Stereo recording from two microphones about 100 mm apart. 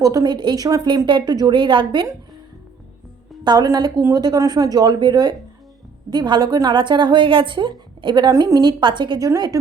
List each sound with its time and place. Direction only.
0.0 s a woman's voice: 35° right (ahead or behind)
3.4 s a woman's voice: 45° right (ahead or behind)
8.3 s a woman's voice: 35° right (ahead or behind)
8.8 s a woman's voice: 50° right (ahead or behind)